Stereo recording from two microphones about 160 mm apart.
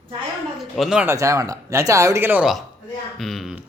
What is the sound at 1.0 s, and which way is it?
Speech, 20° right (ahead or behind).